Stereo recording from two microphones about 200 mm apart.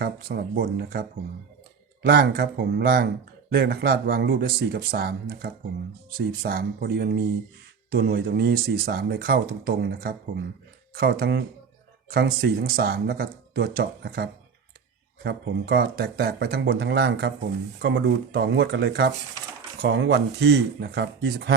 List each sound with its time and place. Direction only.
0.0 s speech: 50° right (ahead or behind)